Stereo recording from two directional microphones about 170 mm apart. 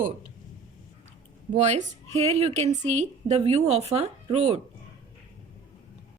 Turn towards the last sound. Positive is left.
turn(degrees=-40)  # may be behind; listen again after turning